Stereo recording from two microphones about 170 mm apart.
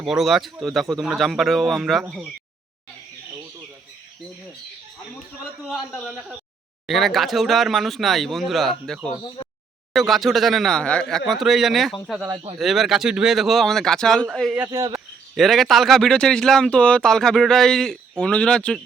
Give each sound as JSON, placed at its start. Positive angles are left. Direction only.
{"t": 0.0, "sound": "a man's voice", "side_deg": 0}
{"t": 5.6, "sound": "a man's voice", "side_deg": 0}
{"t": 14.6, "sound": "speech", "side_deg": -20}
{"t": 14.9, "sound": "a man's voice", "side_deg": 0}